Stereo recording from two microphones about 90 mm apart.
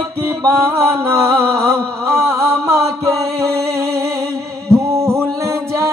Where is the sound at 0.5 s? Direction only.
30° right (ahead or behind).